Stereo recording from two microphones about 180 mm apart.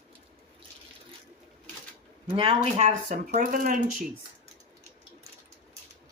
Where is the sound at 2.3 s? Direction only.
35° right (ahead or behind).